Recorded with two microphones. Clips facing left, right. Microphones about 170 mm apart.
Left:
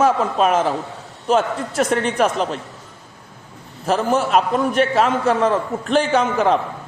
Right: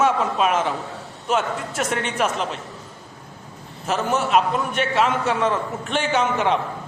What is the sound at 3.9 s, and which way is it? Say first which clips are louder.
A man's voice: left 3 dB; 35° left (ahead or behind).